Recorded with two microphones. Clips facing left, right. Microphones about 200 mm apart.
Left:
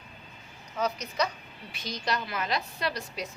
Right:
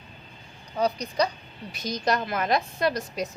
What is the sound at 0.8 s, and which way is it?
A woman's voice, 35° right (ahead or behind).